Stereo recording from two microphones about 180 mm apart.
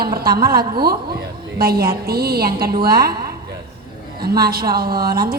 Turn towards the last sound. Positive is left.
turn(degrees=-55)  # may be behind; listen again after turning